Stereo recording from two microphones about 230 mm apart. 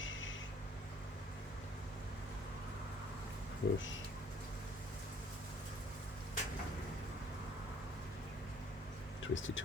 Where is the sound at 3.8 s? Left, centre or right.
Left.